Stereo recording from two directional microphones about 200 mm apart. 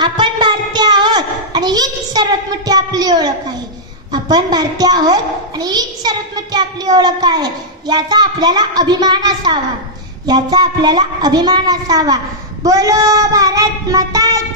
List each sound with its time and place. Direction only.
0.0 s a sound: 25° right (ahead or behind)
4.1 s a child's voice: 20° right (ahead or behind)
12.6 s child singing: 15° right (ahead or behind)